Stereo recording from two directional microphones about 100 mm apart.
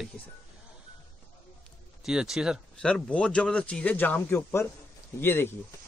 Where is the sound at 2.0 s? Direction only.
5° right (ahead or behind).